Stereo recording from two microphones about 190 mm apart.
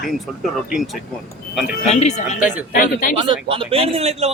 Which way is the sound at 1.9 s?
35° left (ahead or behind).